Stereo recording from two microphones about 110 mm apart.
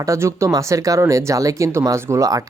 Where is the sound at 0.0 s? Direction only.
30° right (ahead or behind).